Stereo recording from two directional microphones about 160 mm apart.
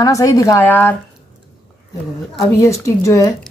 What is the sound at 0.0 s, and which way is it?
Speech, 20° left (ahead or behind).